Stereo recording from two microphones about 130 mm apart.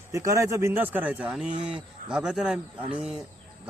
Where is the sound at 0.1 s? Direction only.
25° right (ahead or behind).